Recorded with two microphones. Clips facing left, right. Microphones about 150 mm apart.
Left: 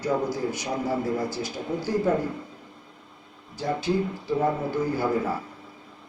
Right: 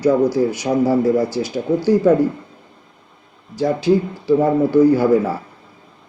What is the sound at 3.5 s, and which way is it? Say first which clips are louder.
Speech: right 10 dB; 80° right.